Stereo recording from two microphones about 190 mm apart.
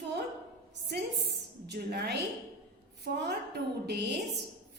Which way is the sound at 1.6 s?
60° right (ahead or behind).